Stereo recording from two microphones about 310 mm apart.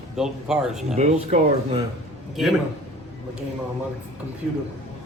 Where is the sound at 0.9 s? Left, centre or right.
Right.